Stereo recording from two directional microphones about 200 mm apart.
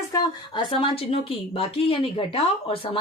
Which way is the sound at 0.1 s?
25° left (ahead or behind).